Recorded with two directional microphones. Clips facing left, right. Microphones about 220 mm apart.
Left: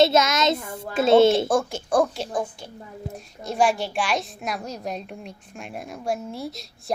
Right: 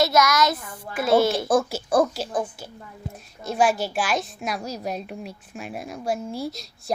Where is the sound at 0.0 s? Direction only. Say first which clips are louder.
Left 2 dB; 25° left (ahead or behind).